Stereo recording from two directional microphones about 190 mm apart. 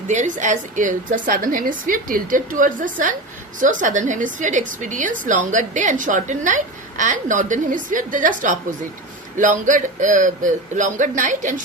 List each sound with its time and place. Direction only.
0.1 s a woman's voice: 40° right (ahead or behind)